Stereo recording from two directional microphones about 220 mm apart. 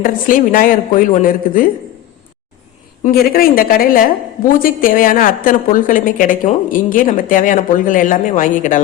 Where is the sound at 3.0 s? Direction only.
40° left (ahead or behind).